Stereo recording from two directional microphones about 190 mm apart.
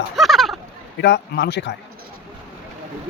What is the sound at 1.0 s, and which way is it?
Speech, 65° left (ahead or behind).